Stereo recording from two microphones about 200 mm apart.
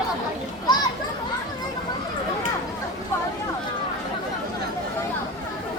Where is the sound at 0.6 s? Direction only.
20° left (ahead or behind).